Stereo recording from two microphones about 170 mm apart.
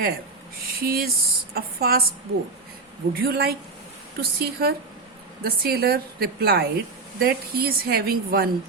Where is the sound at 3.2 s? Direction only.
65° right (ahead or behind).